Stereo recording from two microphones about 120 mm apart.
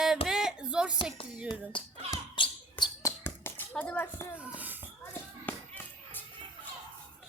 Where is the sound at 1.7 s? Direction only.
45° left (ahead or behind).